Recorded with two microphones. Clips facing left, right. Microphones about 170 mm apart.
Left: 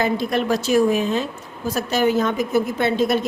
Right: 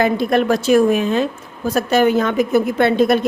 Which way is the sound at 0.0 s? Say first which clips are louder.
Right 5 dB; 55° right (ahead or behind).